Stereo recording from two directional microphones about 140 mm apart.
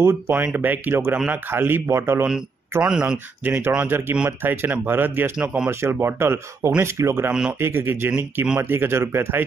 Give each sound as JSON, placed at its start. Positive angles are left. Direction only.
{"t": 0.0, "sound": "speech", "side_deg": -15}
{"t": 2.8, "sound": "speech", "side_deg": -5}